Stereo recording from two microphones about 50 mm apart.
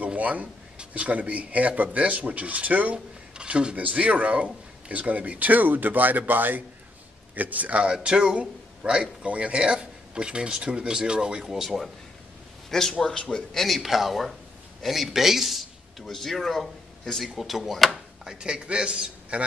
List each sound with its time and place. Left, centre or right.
0.0 s a sound: right
0.7 s a man's voice: right
7.8 s a man's voice: centre
13.5 s speech: centre
16.1 s speech: centre
18.3 s a man's voice: centre